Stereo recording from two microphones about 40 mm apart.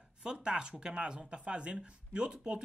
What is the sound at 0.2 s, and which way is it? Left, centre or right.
Speech, centre.